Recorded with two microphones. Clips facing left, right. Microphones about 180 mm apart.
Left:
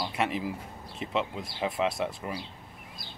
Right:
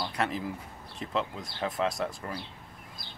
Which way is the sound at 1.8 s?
25° left (ahead or behind).